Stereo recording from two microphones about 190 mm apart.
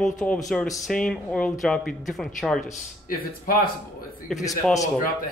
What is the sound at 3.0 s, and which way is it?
Speech, 50° left (ahead or behind).